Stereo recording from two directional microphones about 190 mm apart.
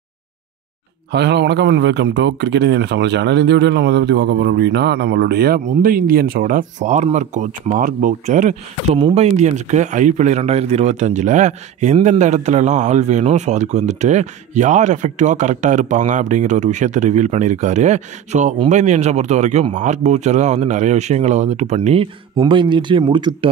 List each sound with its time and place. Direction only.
1.1 s a man's voice: 60° right (ahead or behind); by 23.5 s 25° right (ahead or behind)